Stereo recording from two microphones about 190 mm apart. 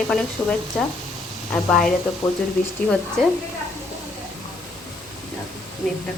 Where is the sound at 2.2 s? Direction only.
20° left (ahead or behind).